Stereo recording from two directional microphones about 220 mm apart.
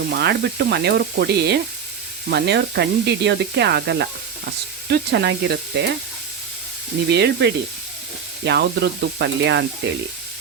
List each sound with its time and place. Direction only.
0.2 s speech: 50° right (ahead or behind)
7.1 s speech: 50° right (ahead or behind)